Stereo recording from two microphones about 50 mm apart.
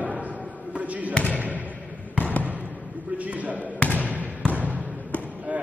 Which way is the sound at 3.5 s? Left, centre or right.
Left.